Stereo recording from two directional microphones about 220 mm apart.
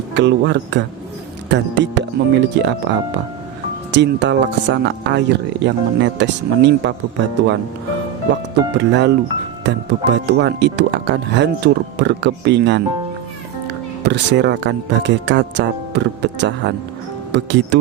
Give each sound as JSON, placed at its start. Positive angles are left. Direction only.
{"t": 0.1, "sound": "speech", "side_deg": -50}
{"t": 3.9, "sound": "speech", "side_deg": -55}
{"t": 8.8, "sound": "speech", "side_deg": -50}
{"t": 14.0, "sound": "speech", "side_deg": -50}